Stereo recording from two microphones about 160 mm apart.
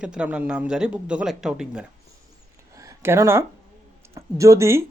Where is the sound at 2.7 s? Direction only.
20° right (ahead or behind).